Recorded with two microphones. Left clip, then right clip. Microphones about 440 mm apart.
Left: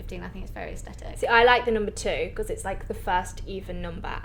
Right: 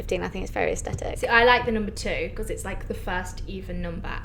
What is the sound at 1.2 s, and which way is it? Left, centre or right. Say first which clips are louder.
A woman's voice: even; left.